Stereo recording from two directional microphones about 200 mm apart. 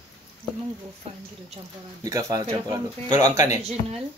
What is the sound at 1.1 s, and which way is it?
Speech, 30° right (ahead or behind).